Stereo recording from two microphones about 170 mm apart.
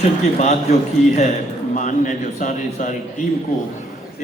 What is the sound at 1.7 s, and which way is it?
A man's voice, 45° left (ahead or behind).